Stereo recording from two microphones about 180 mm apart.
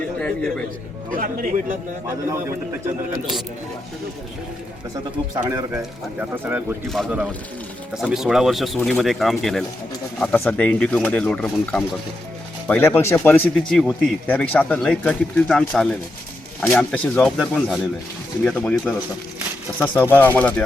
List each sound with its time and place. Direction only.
0.2 s a man's voice: 5° left (ahead or behind)
1.1 s speech: 50° right (ahead or behind)
5.3 s speech: 20° right (ahead or behind)
6.8 s speech: centre (ahead or behind)